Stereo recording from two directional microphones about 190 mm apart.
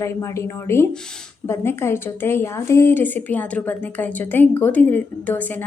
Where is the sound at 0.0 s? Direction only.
15° left (ahead or behind).